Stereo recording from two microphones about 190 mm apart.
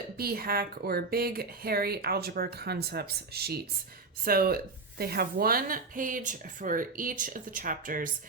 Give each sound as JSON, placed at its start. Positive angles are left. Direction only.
{"t": 0.2, "sound": "a woman's voice", "side_deg": -50}